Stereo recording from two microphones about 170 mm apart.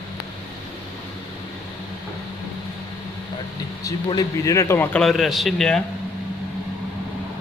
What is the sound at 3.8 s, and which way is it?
A man's voice, 20° left (ahead or behind).